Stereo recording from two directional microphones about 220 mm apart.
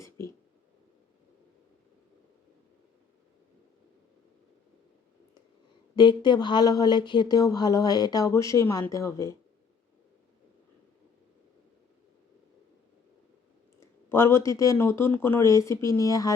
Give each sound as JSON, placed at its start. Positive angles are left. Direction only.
{"t": 6.0, "sound": "speech", "side_deg": 20}
{"t": 13.7, "sound": "speech", "side_deg": 10}